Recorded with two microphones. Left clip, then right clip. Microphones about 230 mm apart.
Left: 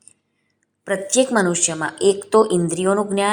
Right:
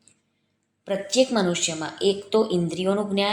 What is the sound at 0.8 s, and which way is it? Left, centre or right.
Speech, left.